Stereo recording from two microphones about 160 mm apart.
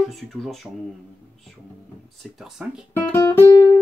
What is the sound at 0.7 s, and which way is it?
Speech, 10° right (ahead or behind).